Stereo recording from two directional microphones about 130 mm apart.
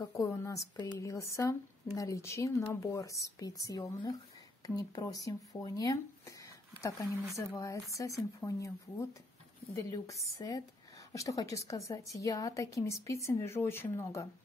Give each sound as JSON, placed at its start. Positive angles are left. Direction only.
{"t": 0.1, "sound": "speech", "side_deg": 20}
{"t": 7.3, "sound": "speech", "side_deg": 30}